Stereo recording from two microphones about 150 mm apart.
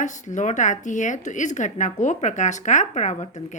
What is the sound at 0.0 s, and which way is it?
Speech, 55° left (ahead or behind).